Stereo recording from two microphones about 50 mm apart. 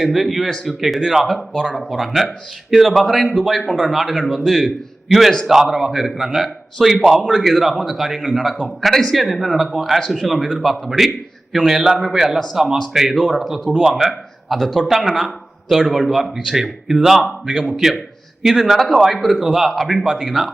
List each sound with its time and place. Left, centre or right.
0.0 s a man's voice: centre
16.3 s a man's voice: centre